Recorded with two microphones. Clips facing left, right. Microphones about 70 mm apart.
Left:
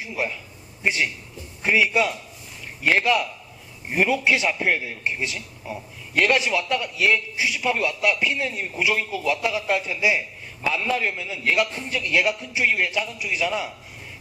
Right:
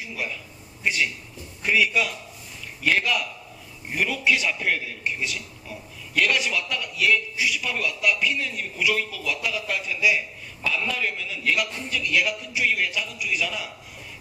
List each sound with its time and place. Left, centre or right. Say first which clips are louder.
0.0 s a man's voice: left 4 dB; left